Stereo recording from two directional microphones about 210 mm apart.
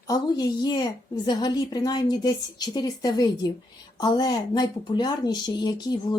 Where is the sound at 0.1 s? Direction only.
20° left (ahead or behind).